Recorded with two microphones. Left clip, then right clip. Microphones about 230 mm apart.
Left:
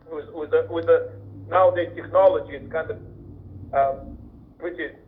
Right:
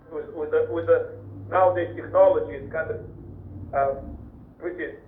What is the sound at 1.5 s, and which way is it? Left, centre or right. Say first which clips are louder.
A man's voice: left 2 dB; left.